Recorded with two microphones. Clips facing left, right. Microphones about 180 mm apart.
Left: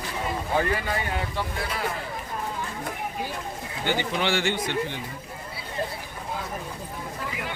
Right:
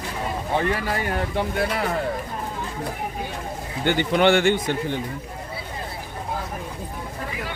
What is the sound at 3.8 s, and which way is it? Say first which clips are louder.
Speech: right 8 dB; 55° right (ahead or behind).